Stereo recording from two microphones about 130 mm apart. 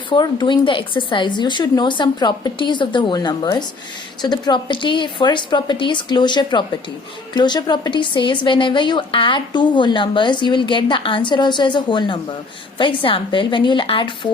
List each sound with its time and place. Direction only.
0.1 s a woman's voice: 35° left (ahead or behind)